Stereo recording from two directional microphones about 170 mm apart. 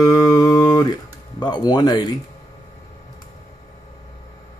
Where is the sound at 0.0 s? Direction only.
20° left (ahead or behind).